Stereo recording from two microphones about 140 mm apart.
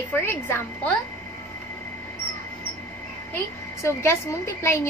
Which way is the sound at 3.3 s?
20° left (ahead or behind).